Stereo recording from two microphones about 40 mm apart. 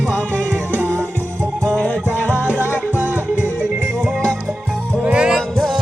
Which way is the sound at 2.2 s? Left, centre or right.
Left.